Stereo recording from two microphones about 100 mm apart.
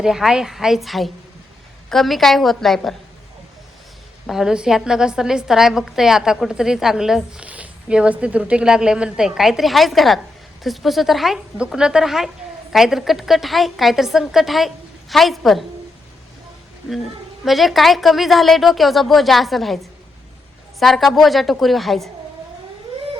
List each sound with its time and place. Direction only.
0.0 s a woman's voice: 5° right (ahead or behind)
4.3 s a woman's voice: 5° right (ahead or behind)
17.4 s a woman's voice: centre (ahead or behind)